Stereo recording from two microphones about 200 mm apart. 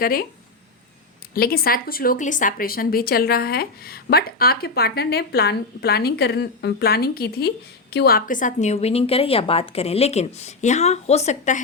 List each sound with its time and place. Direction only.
0.0 s speech: 45° left (ahead or behind)
1.3 s a woman's voice: 50° left (ahead or behind)